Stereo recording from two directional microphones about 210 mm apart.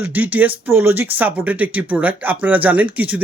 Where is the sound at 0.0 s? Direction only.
5° right (ahead or behind).